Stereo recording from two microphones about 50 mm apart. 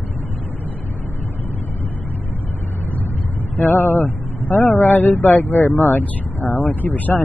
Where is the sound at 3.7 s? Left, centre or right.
Left.